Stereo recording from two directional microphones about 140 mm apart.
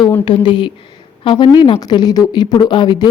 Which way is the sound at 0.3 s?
35° left (ahead or behind).